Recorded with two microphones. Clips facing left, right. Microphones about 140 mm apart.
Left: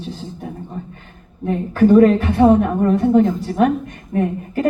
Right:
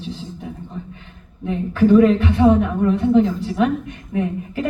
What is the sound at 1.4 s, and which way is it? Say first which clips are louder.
A woman's voice: left 2 dB; 45° left (ahead or behind).